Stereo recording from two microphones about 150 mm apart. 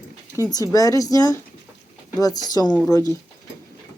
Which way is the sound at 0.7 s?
25° left (ahead or behind).